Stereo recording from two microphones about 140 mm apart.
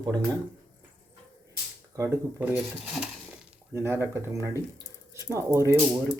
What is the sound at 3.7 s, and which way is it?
Speech, 20° right (ahead or behind).